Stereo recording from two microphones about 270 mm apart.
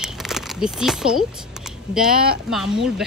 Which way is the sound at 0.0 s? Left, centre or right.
Centre.